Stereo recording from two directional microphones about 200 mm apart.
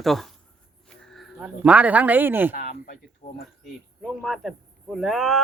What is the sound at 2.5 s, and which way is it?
Speech, 45° left (ahead or behind).